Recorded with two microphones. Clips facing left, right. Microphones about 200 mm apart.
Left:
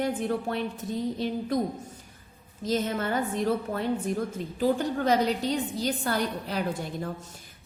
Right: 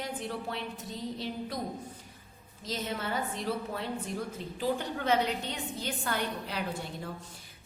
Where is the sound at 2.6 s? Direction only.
50° left (ahead or behind).